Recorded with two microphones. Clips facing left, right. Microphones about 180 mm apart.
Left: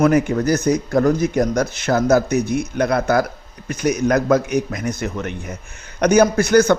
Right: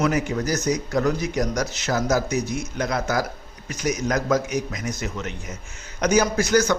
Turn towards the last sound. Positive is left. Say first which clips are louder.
# left 6 dB
turn(degrees=55)  # may be behind; listen again after turning